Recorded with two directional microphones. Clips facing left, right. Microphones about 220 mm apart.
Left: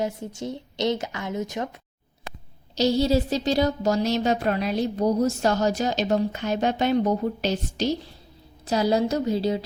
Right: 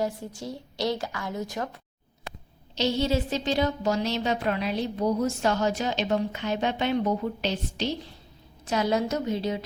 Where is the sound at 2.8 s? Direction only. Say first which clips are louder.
Left 4 dB; 40° left (ahead or behind).